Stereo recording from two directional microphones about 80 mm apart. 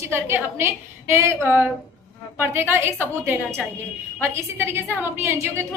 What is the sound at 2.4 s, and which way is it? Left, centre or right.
A woman's voice, right.